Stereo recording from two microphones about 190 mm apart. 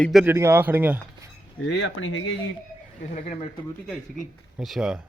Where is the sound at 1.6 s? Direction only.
75° left (ahead or behind); by 2.3 s 90° left.